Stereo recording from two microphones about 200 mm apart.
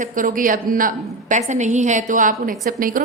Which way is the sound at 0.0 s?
40° right (ahead or behind).